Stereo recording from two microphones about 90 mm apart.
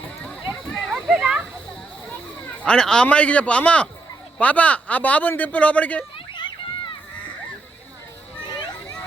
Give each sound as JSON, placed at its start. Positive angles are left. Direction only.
{"t": 0.9, "sound": "a sound", "side_deg": -10}
{"t": 2.6, "sound": "speech", "side_deg": 10}
{"t": 6.3, "sound": "children playing", "side_deg": 60}